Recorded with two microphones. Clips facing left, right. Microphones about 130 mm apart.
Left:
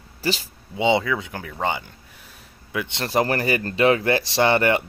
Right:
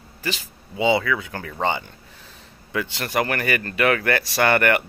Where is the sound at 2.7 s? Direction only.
20° left (ahead or behind).